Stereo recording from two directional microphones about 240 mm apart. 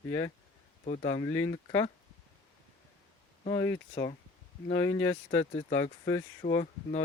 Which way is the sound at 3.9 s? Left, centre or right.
Left.